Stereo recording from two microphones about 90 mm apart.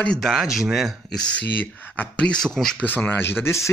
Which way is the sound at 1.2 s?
15° left (ahead or behind).